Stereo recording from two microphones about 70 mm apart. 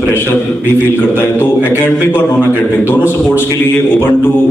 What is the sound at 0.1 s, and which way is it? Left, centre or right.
A man's voice, left.